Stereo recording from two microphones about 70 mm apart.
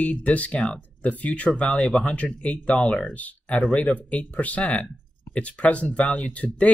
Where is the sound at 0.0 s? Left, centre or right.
Centre.